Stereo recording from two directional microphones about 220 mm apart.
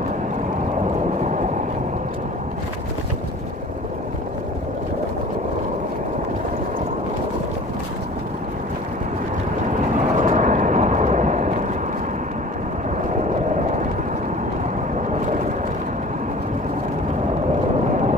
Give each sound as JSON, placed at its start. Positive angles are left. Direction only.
{"t": 9.9, "sound": "vehicle", "side_deg": -35}